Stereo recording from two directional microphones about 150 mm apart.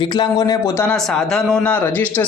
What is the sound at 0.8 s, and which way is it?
Speech, 5° left (ahead or behind).